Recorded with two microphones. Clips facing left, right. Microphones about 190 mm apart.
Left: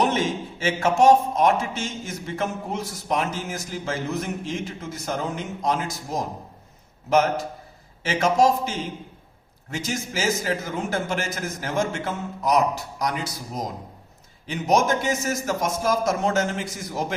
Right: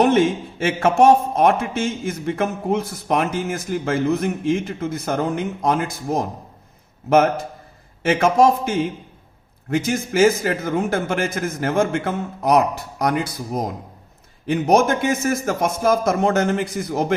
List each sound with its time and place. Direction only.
0.0 s a man's voice: 55° right (ahead or behind)